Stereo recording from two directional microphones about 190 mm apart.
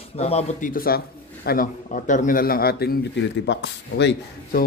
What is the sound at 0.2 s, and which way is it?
A man's voice, 35° left (ahead or behind).